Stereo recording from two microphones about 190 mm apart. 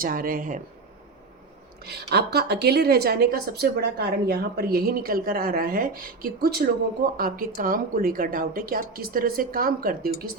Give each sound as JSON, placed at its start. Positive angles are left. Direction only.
{"t": 0.0, "sound": "a woman's voice", "side_deg": -50}
{"t": 1.8, "sound": "a woman's voice", "side_deg": -60}